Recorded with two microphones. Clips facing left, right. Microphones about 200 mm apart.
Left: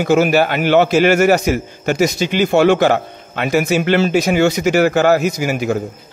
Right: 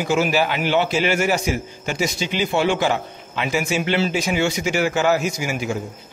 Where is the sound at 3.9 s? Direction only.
45° left (ahead or behind).